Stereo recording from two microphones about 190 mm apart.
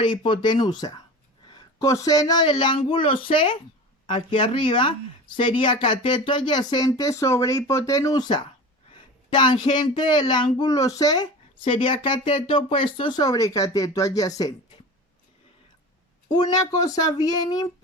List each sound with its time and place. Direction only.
0.0 s speech: 25° left (ahead or behind)
16.3 s speech: 20° left (ahead or behind)